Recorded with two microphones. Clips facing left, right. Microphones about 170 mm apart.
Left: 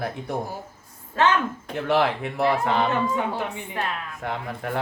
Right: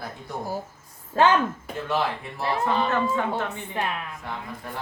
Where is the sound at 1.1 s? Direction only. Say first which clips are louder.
Right 2 dB; 35° right (ahead or behind).